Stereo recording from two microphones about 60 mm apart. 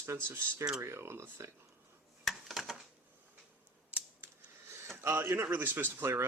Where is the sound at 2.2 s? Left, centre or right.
Centre.